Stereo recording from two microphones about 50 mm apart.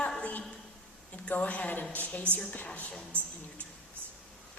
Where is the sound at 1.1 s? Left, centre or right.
Left.